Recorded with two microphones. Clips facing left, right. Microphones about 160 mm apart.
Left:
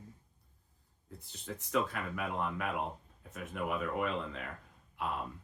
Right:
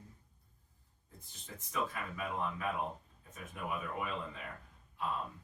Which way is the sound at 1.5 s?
70° left (ahead or behind).